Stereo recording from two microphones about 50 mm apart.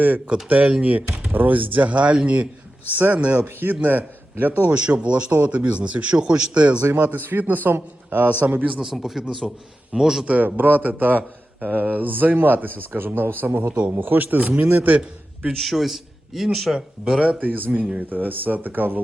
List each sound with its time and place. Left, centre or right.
0.4 s a man's voice: right
3.4 s a man's voice: right
4.7 s speech: right
6.8 s a man's voice: right
8.8 s a man's voice: centre
10.2 s a man's voice: right
15.5 s speech: centre
16.7 s speech: centre
17.4 s a man's voice: right